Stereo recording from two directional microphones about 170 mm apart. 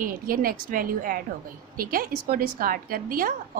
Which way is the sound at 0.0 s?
55° right (ahead or behind).